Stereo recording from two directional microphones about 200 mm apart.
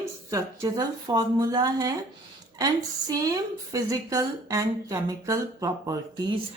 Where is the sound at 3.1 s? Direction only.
20° right (ahead or behind).